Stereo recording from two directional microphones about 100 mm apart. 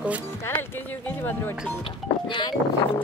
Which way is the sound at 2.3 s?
55° left (ahead or behind).